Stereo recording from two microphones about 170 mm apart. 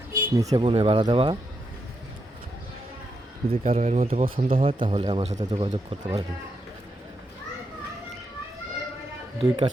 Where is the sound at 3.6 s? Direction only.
40° right (ahead or behind).